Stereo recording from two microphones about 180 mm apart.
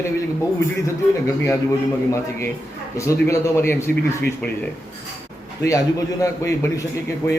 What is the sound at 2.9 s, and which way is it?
Speech, 15° left (ahead or behind).